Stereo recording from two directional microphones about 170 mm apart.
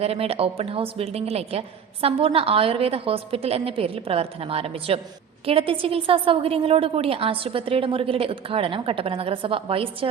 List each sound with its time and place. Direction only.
0.0 s a woman's voice: 35° right (ahead or behind)